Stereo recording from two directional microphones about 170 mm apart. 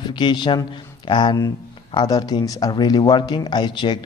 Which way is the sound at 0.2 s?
25° left (ahead or behind).